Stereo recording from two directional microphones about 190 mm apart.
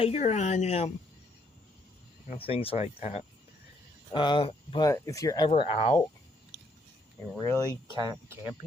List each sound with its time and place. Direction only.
0.0 s speech: 35° left (ahead or behind)
2.2 s speech: 35° left (ahead or behind)
4.1 s speech: 25° left (ahead or behind)
5.5 s speech: 30° left (ahead or behind)
7.3 s speech: 15° left (ahead or behind)
7.9 s speech: 15° right (ahead or behind)